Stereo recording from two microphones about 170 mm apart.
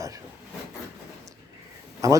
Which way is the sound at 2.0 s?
20° right (ahead or behind).